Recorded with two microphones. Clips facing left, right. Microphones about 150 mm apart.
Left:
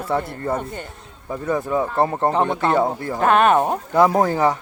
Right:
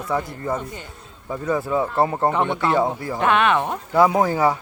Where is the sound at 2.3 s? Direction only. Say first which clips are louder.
Left 2 dB; 35° left (ahead or behind).